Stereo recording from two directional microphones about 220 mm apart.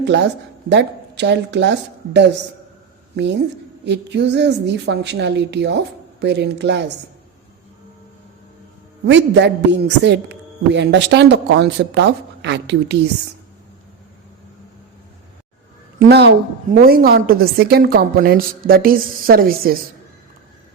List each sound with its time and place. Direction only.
0.1 s a man's voice: 50° right (ahead or behind)
3.8 s a man's voice: 50° right (ahead or behind)
9.0 s a man's voice: 55° right (ahead or behind)
16.0 s a man's voice: 50° right (ahead or behind)